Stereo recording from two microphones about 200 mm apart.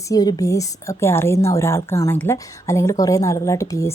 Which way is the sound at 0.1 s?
20° left (ahead or behind).